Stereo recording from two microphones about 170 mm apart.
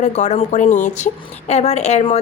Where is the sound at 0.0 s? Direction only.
45° left (ahead or behind).